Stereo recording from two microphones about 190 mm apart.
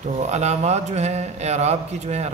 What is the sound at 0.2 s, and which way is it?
Speech, 35° right (ahead or behind).